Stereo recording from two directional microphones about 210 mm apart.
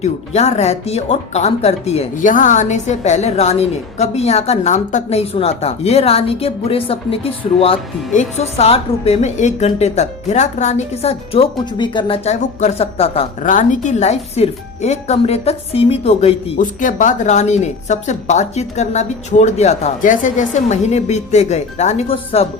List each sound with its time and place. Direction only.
0.0 s speech: 30° left (ahead or behind)
13.4 s speech: 40° left (ahead or behind)